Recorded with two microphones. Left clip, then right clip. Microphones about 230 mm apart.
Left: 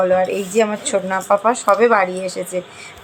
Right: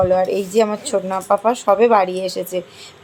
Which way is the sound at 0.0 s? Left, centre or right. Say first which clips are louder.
Even; centre.